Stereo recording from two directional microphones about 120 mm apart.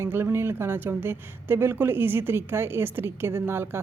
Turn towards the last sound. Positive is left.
turn(degrees=-20)  # may be behind; listen again after turning